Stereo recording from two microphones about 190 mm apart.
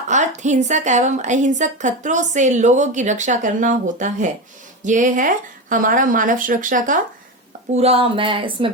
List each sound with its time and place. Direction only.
0.1 s a woman's voice: 40° right (ahead or behind)
7.7 s speech: 35° right (ahead or behind)